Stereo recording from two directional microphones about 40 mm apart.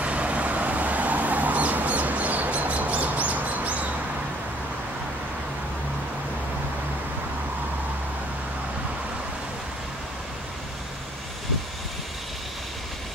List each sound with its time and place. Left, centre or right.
0.0 s vehicle: right